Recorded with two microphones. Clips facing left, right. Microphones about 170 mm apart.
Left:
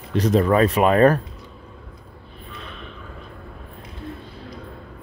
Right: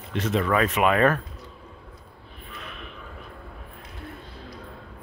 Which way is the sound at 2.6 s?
30° left (ahead or behind).